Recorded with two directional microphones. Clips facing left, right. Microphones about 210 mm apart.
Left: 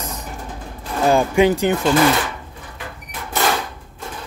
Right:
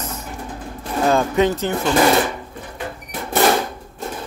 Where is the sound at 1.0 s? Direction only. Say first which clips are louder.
Left 2 dB; 10° left (ahead or behind).